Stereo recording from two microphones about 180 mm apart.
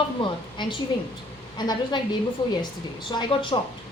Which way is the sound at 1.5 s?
25° left (ahead or behind).